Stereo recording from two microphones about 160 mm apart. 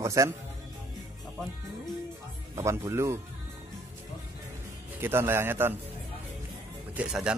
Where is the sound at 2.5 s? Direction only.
20° right (ahead or behind).